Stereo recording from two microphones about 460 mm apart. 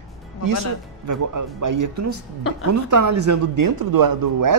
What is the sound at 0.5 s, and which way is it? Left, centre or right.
Speech, right.